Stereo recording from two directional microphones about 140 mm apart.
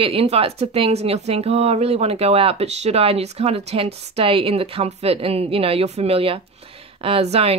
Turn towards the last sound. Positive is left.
turn(degrees=-45)  # may be behind; listen again after turning